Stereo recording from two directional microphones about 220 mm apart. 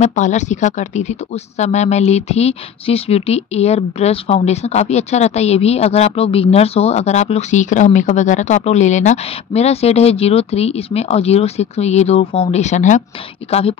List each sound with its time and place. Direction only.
0.0 s speech: 35° left (ahead or behind)